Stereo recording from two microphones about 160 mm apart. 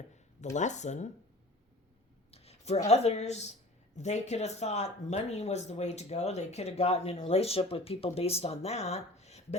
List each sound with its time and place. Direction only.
0.1 s speech: 50° left (ahead or behind)
2.3 s speech: 40° left (ahead or behind)